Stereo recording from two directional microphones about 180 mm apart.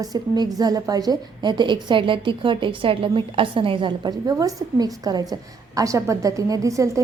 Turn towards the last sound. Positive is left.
turn(degrees=-15)  # may be behind; listen again after turning